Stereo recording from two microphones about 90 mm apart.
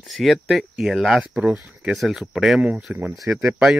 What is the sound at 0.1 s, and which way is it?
Speech, centre (ahead or behind).